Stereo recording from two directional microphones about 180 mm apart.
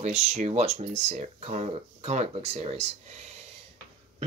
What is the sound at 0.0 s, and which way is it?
Speech, 40° right (ahead or behind).